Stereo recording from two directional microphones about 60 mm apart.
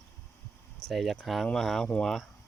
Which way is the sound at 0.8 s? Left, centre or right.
Centre.